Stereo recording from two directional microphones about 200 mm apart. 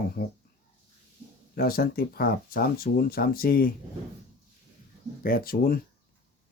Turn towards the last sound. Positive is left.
turn(degrees=45)  # may be behind; listen again after turning